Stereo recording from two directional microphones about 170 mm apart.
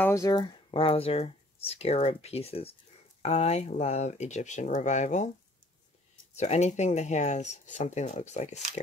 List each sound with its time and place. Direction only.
0.0 s speech: 20° left (ahead or behind); by 5.3 s 45° left (ahead or behind)
6.3 s speech: 40° left (ahead or behind)